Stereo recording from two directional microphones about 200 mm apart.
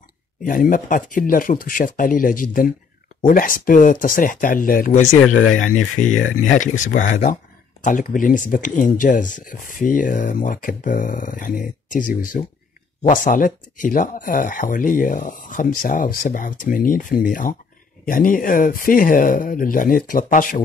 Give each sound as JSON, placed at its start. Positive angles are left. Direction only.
{"t": 0.4, "sound": "speech", "side_deg": 45}